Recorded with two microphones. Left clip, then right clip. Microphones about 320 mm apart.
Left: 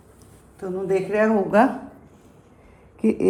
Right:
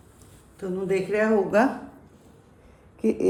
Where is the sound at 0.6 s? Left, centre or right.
Centre.